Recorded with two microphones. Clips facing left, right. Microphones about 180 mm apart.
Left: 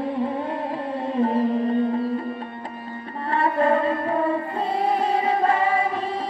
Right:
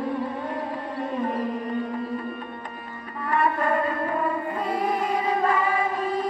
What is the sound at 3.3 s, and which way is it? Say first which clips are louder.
Music: left 3 dB; 30° left (ahead or behind).